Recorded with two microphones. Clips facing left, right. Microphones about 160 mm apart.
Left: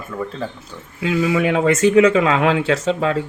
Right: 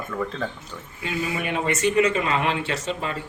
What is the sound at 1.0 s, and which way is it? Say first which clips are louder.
Speech: left 10 dB; 90° left.